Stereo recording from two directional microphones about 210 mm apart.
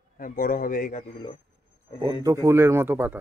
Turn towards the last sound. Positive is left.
turn(degrees=-10)  # may be behind; listen again after turning